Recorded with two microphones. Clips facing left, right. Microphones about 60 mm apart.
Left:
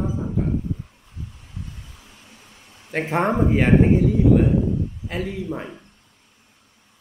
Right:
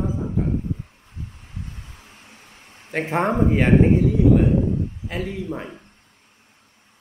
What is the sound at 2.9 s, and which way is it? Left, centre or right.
Speech, centre.